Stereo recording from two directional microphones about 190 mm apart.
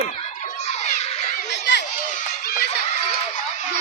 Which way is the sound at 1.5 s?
65° left (ahead or behind).